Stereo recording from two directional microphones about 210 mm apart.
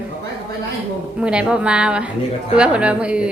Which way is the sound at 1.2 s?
5° right (ahead or behind).